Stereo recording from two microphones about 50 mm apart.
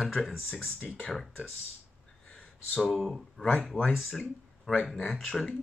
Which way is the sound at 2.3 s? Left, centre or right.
Left.